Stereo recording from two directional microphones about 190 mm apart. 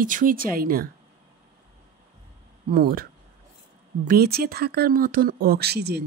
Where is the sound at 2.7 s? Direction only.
50° right (ahead or behind).